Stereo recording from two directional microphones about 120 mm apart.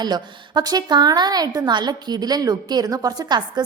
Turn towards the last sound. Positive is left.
turn(degrees=-30)  # may be behind; listen again after turning